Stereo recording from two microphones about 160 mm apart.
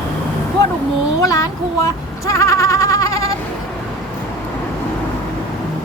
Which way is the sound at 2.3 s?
20° left (ahead or behind).